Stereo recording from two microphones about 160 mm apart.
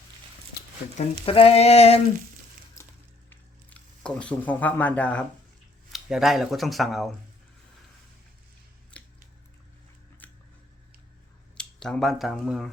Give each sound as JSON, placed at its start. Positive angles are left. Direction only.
{"t": 1.2, "sound": "a sound", "side_deg": 35}
{"t": 3.2, "sound": "a sound", "side_deg": 10}
{"t": 5.9, "sound": "speech", "side_deg": 0}
{"t": 8.9, "sound": "squish", "side_deg": 10}
{"t": 10.2, "sound": "scissors", "side_deg": 10}
{"t": 11.5, "sound": "speech", "side_deg": 5}